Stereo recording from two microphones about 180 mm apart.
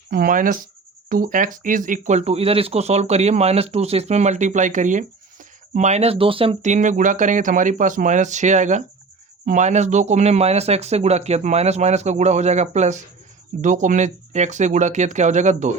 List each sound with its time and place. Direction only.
0.1 s speech: 50° right (ahead or behind)